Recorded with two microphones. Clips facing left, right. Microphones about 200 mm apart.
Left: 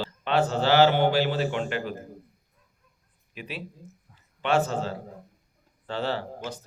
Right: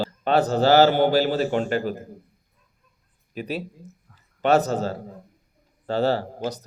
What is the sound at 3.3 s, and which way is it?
A man's voice, 40° right (ahead or behind).